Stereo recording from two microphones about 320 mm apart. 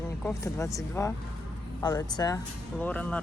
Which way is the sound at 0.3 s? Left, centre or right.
Centre.